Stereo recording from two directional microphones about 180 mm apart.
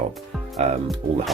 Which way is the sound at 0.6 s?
35° right (ahead or behind).